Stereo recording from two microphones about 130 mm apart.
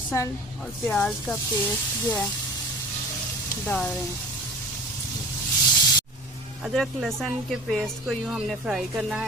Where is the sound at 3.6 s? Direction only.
10° left (ahead or behind).